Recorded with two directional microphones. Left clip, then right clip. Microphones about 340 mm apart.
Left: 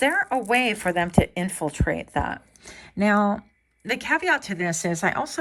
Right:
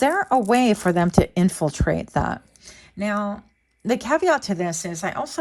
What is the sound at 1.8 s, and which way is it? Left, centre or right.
Speech, left.